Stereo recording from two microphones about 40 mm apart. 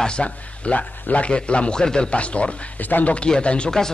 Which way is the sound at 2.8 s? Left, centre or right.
Left.